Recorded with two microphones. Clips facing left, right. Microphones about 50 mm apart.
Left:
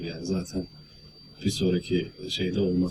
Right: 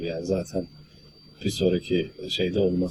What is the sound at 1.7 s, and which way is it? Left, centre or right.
Speech, centre.